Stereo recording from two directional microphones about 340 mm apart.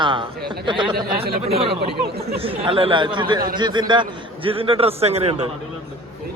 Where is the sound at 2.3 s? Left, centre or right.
Centre.